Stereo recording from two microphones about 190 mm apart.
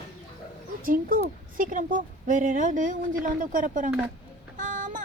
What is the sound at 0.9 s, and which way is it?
Speech, 45° right (ahead or behind).